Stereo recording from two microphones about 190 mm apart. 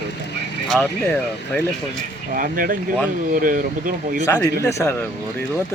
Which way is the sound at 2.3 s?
45° right (ahead or behind).